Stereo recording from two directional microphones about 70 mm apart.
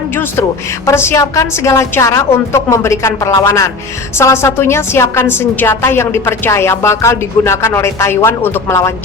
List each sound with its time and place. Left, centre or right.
0.9 s a woman's voice: left